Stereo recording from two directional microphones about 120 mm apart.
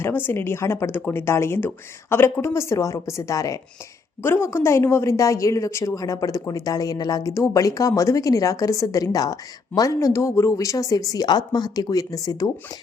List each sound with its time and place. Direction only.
0.0 s a woman's voice: 20° left (ahead or behind)